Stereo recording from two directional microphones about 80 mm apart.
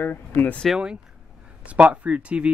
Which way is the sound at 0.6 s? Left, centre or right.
Centre.